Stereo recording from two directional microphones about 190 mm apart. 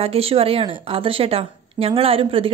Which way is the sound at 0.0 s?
30° right (ahead or behind).